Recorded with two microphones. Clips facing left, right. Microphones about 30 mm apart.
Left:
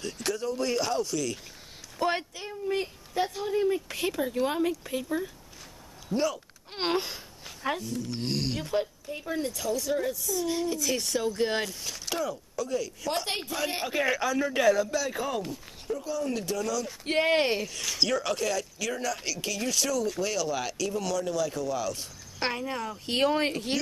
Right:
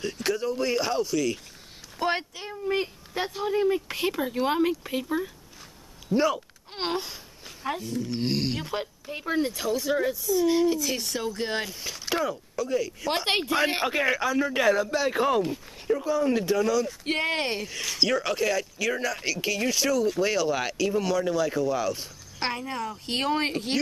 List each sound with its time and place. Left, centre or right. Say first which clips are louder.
0.0 s speech: right 4 dB; centre
6.1 s speech: right 4 dB; centre
6.7 s a sound: left 1 dB; centre
7.8 s speech: right 4 dB; centre
9.0 s speech: right 5 dB; right
10.8 s speech: left 1 dB; centre
13.5 s a woman's voice: right 7 dB; right
13.9 s speech: right 2 dB; centre
15.0 s speech: right 6 dB; right
17.2 s speech: left 5 dB; centre
17.6 s speech: right 2 dB; centre